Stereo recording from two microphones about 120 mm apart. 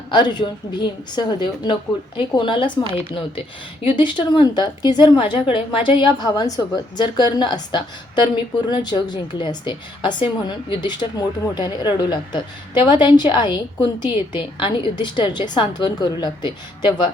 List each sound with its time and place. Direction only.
0.1 s a woman's voice: 40° left (ahead or behind)